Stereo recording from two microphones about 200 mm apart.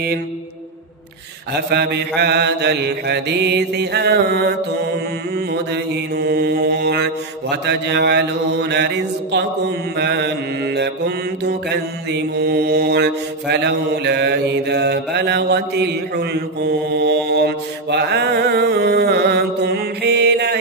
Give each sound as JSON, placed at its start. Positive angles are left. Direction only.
{"t": 1.5, "sound": "mantra", "side_deg": -55}
{"t": 6.1, "sound": "mantra", "side_deg": -55}